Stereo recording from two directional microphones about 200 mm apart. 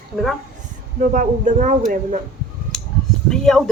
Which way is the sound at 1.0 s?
40° right (ahead or behind).